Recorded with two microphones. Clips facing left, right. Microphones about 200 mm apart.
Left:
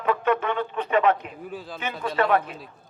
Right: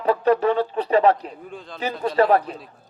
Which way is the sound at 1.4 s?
5° left (ahead or behind).